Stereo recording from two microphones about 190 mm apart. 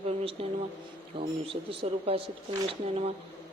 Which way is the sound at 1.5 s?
30° right (ahead or behind).